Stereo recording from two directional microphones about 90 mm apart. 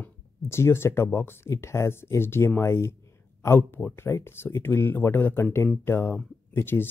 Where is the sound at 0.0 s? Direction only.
30° left (ahead or behind).